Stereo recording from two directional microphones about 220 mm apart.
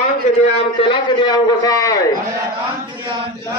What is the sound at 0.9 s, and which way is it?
A man's voice, 20° left (ahead or behind).